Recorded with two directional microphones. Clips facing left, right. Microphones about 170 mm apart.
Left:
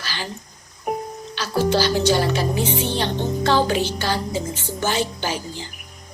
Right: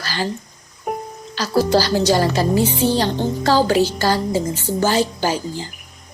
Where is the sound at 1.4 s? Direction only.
40° right (ahead or behind).